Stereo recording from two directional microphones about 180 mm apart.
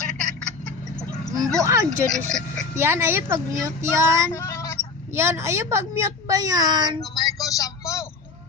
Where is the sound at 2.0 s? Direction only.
5° left (ahead or behind).